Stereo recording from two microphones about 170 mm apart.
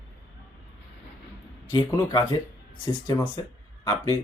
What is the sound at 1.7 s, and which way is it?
Speech, 25° left (ahead or behind).